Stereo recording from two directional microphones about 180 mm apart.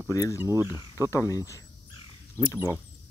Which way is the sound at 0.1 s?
20° left (ahead or behind).